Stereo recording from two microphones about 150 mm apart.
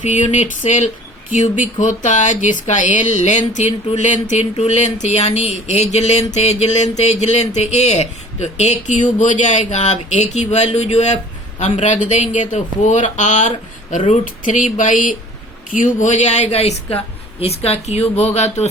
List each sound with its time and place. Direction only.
0.0 s speech: 50° left (ahead or behind)